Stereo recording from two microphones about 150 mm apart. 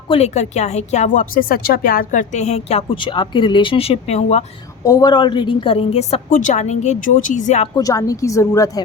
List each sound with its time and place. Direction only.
0.1 s speech: 45° left (ahead or behind); by 2.2 s 70° left (ahead or behind)
2.4 s speech: 45° left (ahead or behind)
4.9 s speech: 25° left (ahead or behind); by 6.1 s 40° left (ahead or behind)
6.3 s speech: 55° left (ahead or behind)
7.8 s a woman's voice: 25° left (ahead or behind)